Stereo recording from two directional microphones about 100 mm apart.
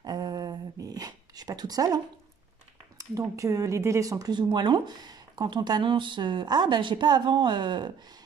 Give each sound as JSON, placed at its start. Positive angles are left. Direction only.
{"t": 0.0, "sound": "a sound", "side_deg": -40}
{"t": 3.0, "sound": "speech", "side_deg": -30}
{"t": 4.4, "sound": "speech", "side_deg": -50}